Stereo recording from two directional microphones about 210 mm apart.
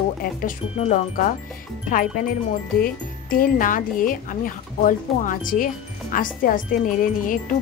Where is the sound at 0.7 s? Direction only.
30° left (ahead or behind).